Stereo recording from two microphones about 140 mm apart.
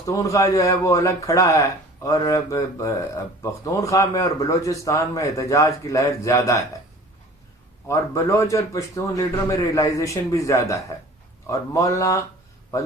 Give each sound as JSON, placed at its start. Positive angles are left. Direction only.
{"t": 0.2, "sound": "a man's voice", "side_deg": 25}
{"t": 7.9, "sound": "a man's voice", "side_deg": 20}